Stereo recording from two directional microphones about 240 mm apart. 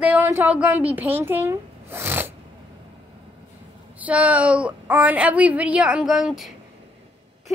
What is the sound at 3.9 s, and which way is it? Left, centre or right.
A woman's voice, centre.